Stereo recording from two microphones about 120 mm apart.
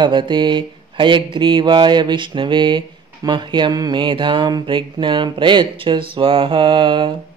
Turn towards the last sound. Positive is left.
turn(degrees=-45)  # may be behind; listen again after turning